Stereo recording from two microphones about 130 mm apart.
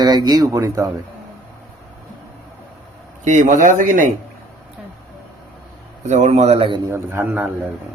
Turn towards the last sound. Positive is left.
turn(degrees=-15)  # may be behind; listen again after turning